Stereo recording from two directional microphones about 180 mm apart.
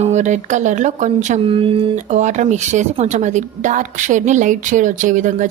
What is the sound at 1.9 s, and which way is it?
A woman's voice, 40° right (ahead or behind).